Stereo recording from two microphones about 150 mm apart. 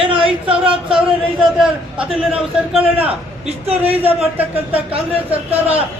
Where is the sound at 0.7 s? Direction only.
5° right (ahead or behind).